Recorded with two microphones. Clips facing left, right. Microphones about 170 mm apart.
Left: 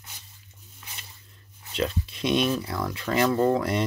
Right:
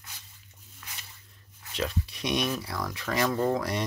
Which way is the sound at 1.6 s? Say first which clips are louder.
Left 4 dB; 25° left (ahead or behind).